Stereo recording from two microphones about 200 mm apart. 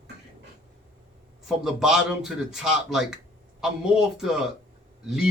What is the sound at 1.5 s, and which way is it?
Speech, centre (ahead or behind).